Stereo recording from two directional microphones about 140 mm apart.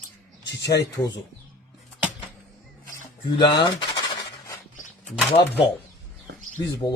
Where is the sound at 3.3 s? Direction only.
35° left (ahead or behind).